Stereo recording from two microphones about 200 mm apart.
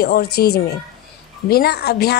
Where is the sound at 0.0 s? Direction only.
50° left (ahead or behind).